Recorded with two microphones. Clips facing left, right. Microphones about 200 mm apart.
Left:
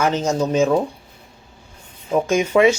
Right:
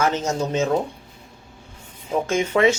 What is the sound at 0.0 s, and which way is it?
Speech, 15° left (ahead or behind).